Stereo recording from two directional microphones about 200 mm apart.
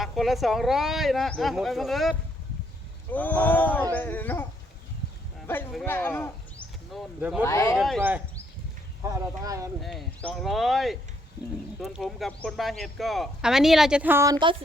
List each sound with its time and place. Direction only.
0.0 s speech: centre (ahead or behind)
5.7 s speech: 10° left (ahead or behind)
6.9 s speech: 5° right (ahead or behind)
7.4 s speech: 15° left (ahead or behind)
7.8 s speech: centre (ahead or behind)
9.0 s speech: 15° right (ahead or behind)
9.8 s speech: centre (ahead or behind)